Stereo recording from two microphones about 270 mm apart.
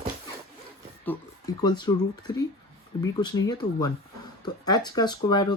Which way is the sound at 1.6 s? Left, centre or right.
Centre.